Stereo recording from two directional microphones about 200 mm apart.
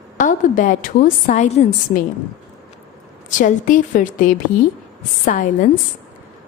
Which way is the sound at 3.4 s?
40° left (ahead or behind).